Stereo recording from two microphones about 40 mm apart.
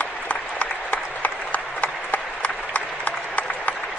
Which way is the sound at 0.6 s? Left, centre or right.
Left.